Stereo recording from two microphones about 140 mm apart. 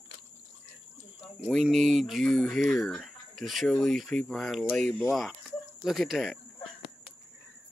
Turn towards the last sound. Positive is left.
turn(degrees=-5)  # may be behind; listen again after turning